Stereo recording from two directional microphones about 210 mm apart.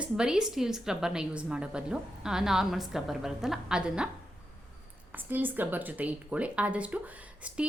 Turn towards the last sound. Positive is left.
turn(degrees=-5)  # may be behind; listen again after turning